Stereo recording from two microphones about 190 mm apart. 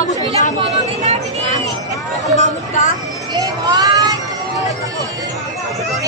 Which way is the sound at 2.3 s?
40° left (ahead or behind).